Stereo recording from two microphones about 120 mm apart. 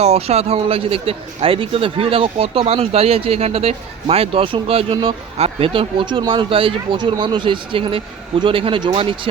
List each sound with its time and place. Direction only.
0.0 s a man's voice: 60° right (ahead or behind); by 9.1 s 40° right (ahead or behind)